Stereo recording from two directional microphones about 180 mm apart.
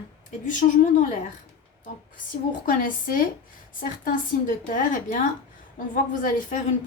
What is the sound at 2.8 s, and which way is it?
A woman's voice, 50° left (ahead or behind).